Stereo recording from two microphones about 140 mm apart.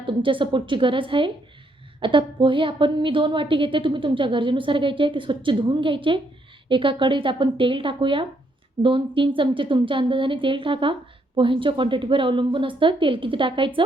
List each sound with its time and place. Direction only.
0.0 s a woman's voice: 35° right (ahead or behind)